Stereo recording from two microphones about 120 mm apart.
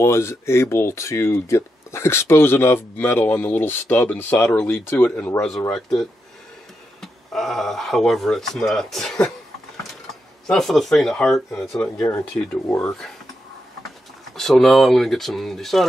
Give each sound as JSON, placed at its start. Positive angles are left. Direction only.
{"t": 0.0, "sound": "speech", "side_deg": 20}
{"t": 10.4, "sound": "speech", "side_deg": 0}
{"t": 11.8, "sound": "speech", "side_deg": 15}
{"t": 14.3, "sound": "speech", "side_deg": 5}